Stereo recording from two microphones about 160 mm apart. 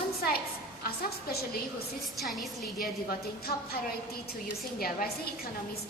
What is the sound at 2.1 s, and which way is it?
Speech, centre (ahead or behind).